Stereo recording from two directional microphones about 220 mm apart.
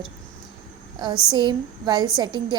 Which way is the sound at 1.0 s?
20° right (ahead or behind).